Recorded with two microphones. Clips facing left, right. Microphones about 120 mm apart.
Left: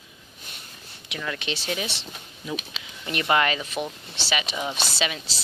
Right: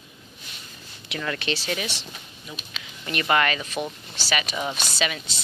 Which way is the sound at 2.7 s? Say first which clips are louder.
Even; 20° left (ahead or behind).